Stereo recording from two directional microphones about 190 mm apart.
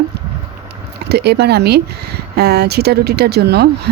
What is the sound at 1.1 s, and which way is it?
Speech, 60° right (ahead or behind).